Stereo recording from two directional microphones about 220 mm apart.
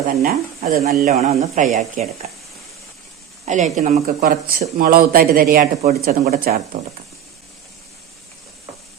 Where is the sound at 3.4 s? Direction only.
35° right (ahead or behind).